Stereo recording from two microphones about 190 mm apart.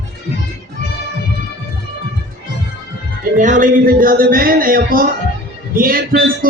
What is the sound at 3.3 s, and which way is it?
Speech, 40° right (ahead or behind).